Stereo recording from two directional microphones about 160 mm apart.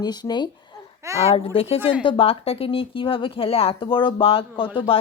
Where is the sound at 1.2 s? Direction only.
35° left (ahead or behind).